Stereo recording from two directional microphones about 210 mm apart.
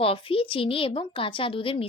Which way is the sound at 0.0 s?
25° left (ahead or behind).